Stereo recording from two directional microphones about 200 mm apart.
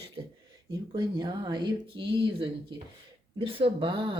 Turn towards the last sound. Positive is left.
turn(degrees=-25)  # may be behind; listen again after turning